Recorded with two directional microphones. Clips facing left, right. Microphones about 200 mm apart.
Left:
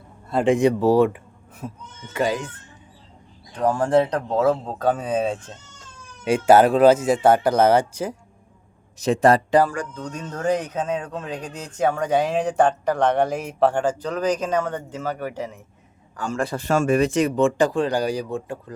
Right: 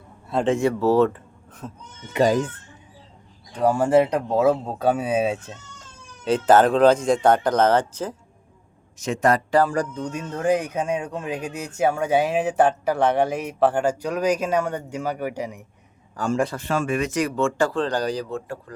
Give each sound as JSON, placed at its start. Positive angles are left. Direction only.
{"t": 0.4, "sound": "speech", "side_deg": 15}
{"t": 3.5, "sound": "speech", "side_deg": -10}
{"t": 6.2, "sound": "speech", "side_deg": 10}
{"t": 9.0, "sound": "speech", "side_deg": 35}
{"t": 9.9, "sound": "speech", "side_deg": -10}
{"t": 16.6, "sound": "speech", "side_deg": 40}
{"t": 17.1, "sound": "speech", "side_deg": 25}